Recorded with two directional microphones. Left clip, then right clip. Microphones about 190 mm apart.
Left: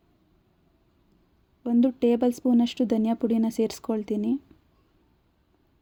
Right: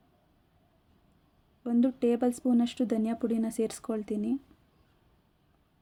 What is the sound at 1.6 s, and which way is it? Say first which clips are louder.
Speech: left 5 dB; 15° left (ahead or behind).